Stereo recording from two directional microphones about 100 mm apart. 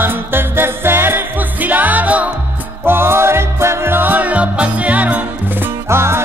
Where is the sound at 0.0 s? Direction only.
20° right (ahead or behind).